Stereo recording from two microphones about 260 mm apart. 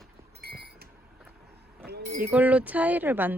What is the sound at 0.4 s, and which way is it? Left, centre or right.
Chink, right.